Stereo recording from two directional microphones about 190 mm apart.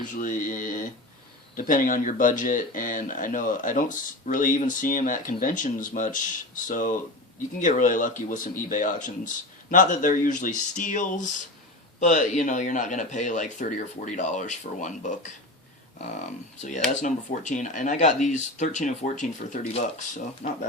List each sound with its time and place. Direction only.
0.0 s a man's voice: 45° left (ahead or behind)
16.6 s speech: 40° left (ahead or behind)